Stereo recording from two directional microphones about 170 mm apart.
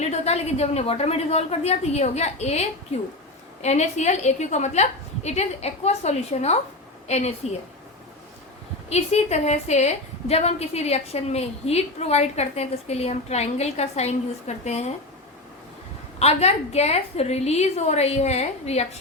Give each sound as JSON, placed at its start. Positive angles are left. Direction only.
{"t": 0.0, "sound": "a woman's voice", "side_deg": 40}
{"t": 8.9, "sound": "a woman's voice", "side_deg": 40}
{"t": 16.1, "sound": "a woman's voice", "side_deg": 40}